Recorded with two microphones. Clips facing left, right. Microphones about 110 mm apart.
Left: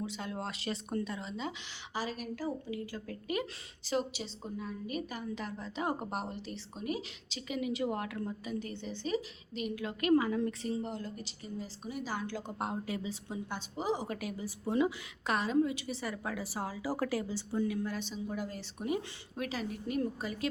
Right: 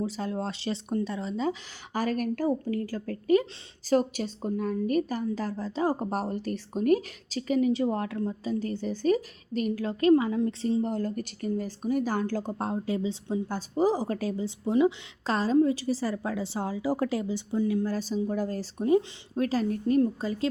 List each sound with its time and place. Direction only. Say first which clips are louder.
0.0 s a woman's voice: right 7 dB; 35° right (ahead or behind)
10.8 s a woman's voice: right 10 dB; 45° right (ahead or behind); by 13.4 s 25° right (ahead or behind)
13.5 s a woman's voice: right 9 dB; 40° right (ahead or behind); by 17.7 s 20° right (ahead or behind)
17.8 s a woman's voice: right 9 dB; 40° right (ahead or behind)